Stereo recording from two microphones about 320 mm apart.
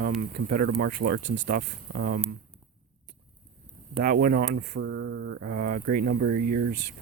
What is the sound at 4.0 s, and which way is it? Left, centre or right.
Speech, right.